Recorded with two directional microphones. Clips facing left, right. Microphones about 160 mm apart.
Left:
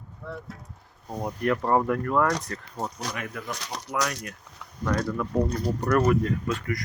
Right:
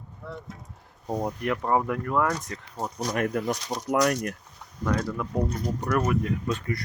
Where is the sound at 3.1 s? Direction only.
45° right (ahead or behind).